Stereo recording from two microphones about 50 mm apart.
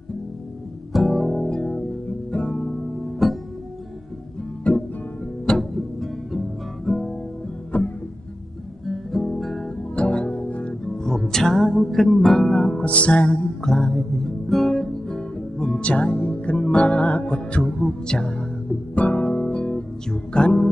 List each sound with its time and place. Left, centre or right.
0.9 s music: centre
1.5 s music: centre
2.6 s music: centre
4.7 s music: left
5.5 s music: centre
7.7 s music: left
8.8 s guitar: centre
9.9 s music: left
10.7 s music: centre
12.8 s music: left
13.6 s music: centre
18.9 s music: left